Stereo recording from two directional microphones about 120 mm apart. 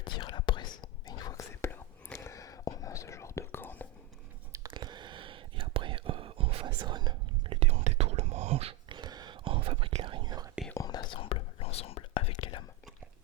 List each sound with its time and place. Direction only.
0.0 s whispering: 40° left (ahead or behind); by 3.8 s 15° left (ahead or behind)
4.7 s whispering: 40° right (ahead or behind)
6.7 s whispering: 40° right (ahead or behind)
7.5 s whispering: 60° right (ahead or behind)
8.9 s whispering: 35° right (ahead or behind)
10.8 s whispering: 35° left (ahead or behind); by 12.3 s 55° left (ahead or behind)
12.4 s whispering: 40° left (ahead or behind)